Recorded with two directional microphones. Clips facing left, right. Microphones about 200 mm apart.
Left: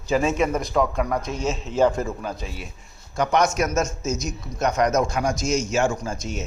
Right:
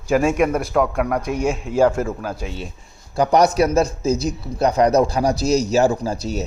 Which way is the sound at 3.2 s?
35° right (ahead or behind).